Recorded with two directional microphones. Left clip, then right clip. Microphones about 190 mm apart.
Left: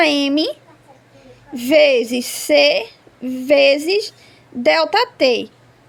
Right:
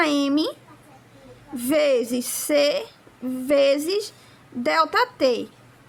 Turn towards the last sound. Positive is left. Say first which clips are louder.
# left 5 dB
turn(degrees=20)  # may be behind; listen again after turning